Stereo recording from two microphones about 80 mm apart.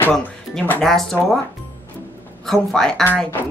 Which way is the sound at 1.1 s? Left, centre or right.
Left.